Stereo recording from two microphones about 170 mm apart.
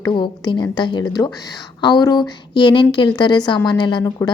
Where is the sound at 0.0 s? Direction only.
25° left (ahead or behind).